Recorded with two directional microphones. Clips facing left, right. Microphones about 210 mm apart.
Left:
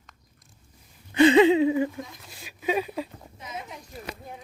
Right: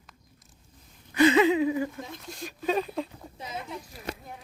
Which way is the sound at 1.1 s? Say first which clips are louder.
Left 4 dB; 25° left (ahead or behind).